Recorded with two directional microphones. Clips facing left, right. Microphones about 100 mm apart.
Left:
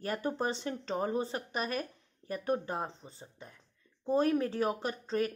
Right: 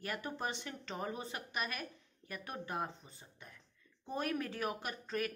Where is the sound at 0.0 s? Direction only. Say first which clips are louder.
Left 7 dB; 35° left (ahead or behind).